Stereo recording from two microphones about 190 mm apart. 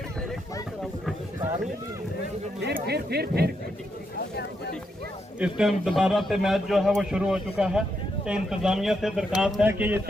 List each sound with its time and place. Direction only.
2.6 s speech: 60° right (ahead or behind)
5.4 s a man's voice: centre (ahead or behind)